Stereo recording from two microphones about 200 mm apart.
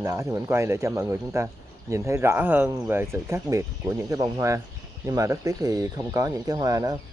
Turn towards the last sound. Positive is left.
turn(degrees=-15)  # may be behind; listen again after turning